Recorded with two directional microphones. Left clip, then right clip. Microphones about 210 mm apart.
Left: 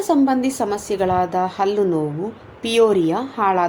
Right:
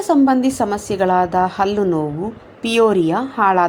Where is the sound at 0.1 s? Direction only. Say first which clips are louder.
Right 3 dB; 10° right (ahead or behind).